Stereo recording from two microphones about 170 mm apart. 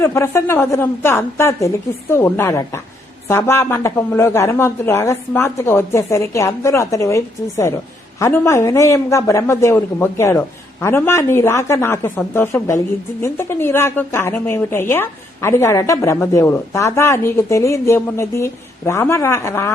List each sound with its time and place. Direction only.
0.0 s a woman's voice: 15° left (ahead or behind)